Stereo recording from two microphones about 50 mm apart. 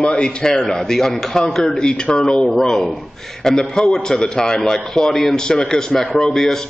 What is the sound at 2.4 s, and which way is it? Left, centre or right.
A man's voice, centre.